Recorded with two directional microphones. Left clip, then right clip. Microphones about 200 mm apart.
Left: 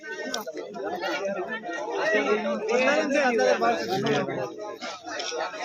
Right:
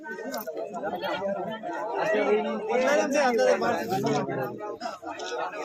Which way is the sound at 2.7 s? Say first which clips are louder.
Left 1 dB; 45° left (ahead or behind).